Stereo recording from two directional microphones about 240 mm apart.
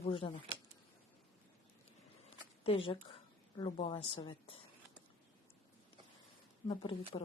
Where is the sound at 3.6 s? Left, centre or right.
Left.